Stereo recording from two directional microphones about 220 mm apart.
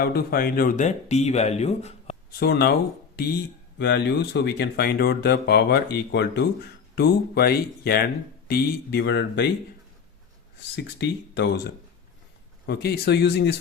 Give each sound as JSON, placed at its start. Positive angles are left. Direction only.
{"t": 0.0, "sound": "speech", "side_deg": 45}
{"t": 2.4, "sound": "speech", "side_deg": 45}
{"t": 10.9, "sound": "speech", "side_deg": 50}
{"t": 12.6, "sound": "speech", "side_deg": 45}